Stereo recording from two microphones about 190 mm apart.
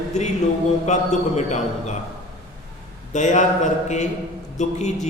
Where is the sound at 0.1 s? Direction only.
40° left (ahead or behind).